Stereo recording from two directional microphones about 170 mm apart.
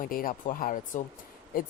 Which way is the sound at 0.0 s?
55° left (ahead or behind).